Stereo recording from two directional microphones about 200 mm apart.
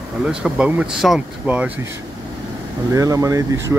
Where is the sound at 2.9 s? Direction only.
15° right (ahead or behind).